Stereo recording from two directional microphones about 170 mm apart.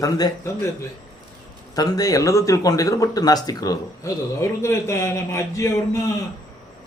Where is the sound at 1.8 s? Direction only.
20° left (ahead or behind).